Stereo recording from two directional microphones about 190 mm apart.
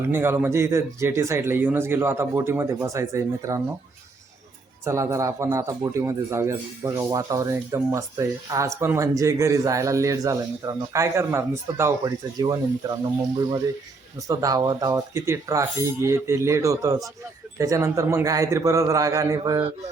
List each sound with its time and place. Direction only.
0.1 s a man's voice: 10° right (ahead or behind)
4.9 s a man's voice: 15° right (ahead or behind)
14.3 s a man's voice: 20° right (ahead or behind)